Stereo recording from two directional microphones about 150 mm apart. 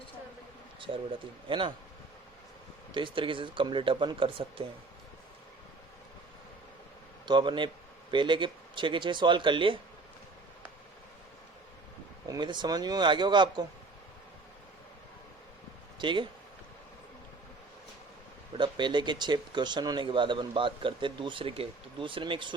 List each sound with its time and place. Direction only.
0.8 s speech: 35° right (ahead or behind)
2.9 s speech: 35° right (ahead or behind)
7.3 s speech: 30° right (ahead or behind)
12.3 s a man's voice: 30° right (ahead or behind)
16.0 s speech: 30° right (ahead or behind)
18.5 s speech: 30° right (ahead or behind)